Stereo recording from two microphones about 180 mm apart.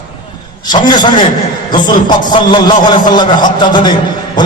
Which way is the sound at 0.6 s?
25° left (ahead or behind).